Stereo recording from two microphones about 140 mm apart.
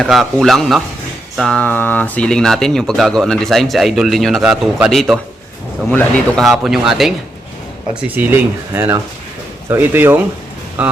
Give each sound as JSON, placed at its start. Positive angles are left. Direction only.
{"t": 0.0, "sound": "speech", "side_deg": 5}
{"t": 5.9, "sound": "speech", "side_deg": 10}
{"t": 6.4, "sound": "speech", "side_deg": 0}
{"t": 8.0, "sound": "speech", "side_deg": -15}